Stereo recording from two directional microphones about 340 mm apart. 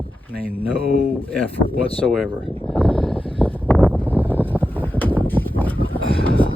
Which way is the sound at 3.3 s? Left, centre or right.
Centre.